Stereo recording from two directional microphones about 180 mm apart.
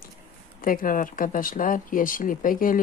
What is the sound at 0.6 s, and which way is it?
Speech, 50° left (ahead or behind).